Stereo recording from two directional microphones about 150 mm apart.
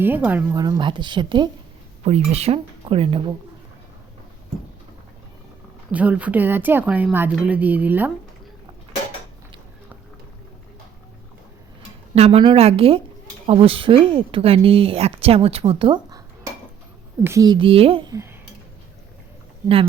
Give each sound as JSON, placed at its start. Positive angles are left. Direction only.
{"t": 0.0, "sound": "a woman's voice", "side_deg": -10}
{"t": 0.5, "sound": "speech", "side_deg": -25}
{"t": 2.0, "sound": "speech", "side_deg": -45}
{"t": 5.9, "sound": "a woman's voice", "side_deg": -10}
{"t": 12.1, "sound": "speech", "side_deg": -45}
{"t": 17.2, "sound": "speech", "side_deg": -25}
{"t": 18.1, "sound": "a sound", "side_deg": -20}